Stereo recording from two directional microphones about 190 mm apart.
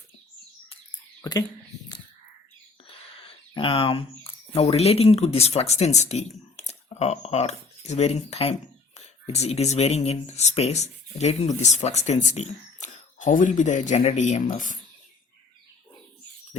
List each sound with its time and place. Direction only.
1.2 s speech: 20° left (ahead or behind)
2.8 s speech: 30° left (ahead or behind)